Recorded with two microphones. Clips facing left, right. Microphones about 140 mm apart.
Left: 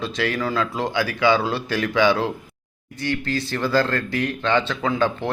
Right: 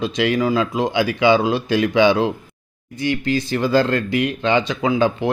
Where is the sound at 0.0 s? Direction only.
20° right (ahead or behind).